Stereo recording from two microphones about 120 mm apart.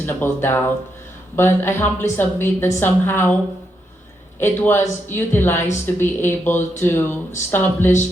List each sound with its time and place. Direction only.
0.0 s a woman's voice: 20° left (ahead or behind)
4.4 s a woman's voice: 20° left (ahead or behind)